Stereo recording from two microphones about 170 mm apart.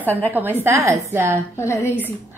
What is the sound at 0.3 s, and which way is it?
A woman's voice, 10° right (ahead or behind).